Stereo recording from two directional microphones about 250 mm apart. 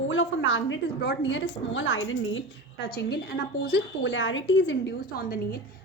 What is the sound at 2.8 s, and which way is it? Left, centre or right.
A woman's voice, left.